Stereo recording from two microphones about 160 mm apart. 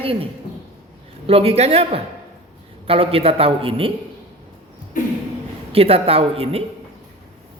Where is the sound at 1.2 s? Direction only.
40° right (ahead or behind).